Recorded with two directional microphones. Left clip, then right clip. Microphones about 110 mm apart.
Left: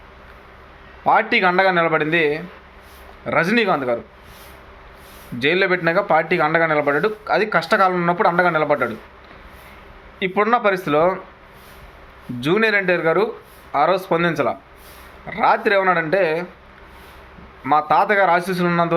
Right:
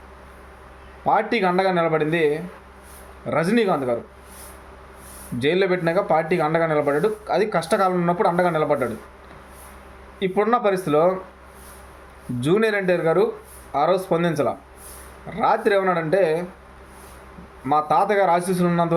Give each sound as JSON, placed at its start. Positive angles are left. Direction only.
{"t": 1.0, "sound": "speech", "side_deg": -20}
{"t": 5.4, "sound": "speech", "side_deg": -20}
{"t": 10.2, "sound": "speech", "side_deg": -20}
{"t": 12.4, "sound": "speech", "side_deg": -20}
{"t": 17.6, "sound": "speech", "side_deg": -20}